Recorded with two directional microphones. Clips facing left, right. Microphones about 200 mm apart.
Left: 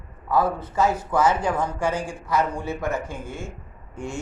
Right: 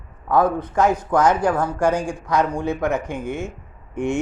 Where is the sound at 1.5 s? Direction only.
10° right (ahead or behind).